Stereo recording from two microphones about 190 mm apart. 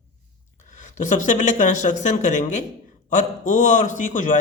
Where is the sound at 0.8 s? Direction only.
40° left (ahead or behind).